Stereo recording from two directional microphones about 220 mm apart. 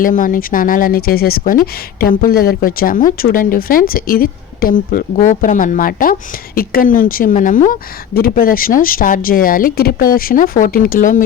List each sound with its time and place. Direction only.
0.0 s speech: 40° left (ahead or behind)